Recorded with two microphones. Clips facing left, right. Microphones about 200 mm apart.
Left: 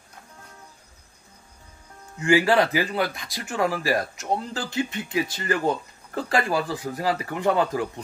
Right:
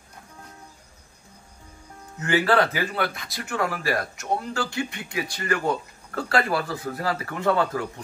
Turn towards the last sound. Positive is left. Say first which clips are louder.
# left 1 dB
turn(degrees=15)  # may be behind; listen again after turning